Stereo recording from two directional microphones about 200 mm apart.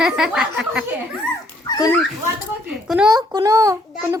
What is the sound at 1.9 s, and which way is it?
Dog, centre (ahead or behind).